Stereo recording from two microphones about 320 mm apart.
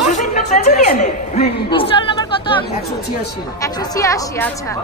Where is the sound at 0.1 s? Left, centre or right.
Left.